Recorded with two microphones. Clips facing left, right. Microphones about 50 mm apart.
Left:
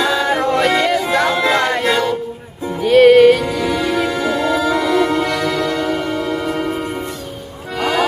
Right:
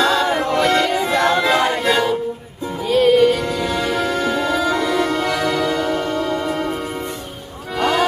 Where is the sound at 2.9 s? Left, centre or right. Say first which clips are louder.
Left 6 dB; left.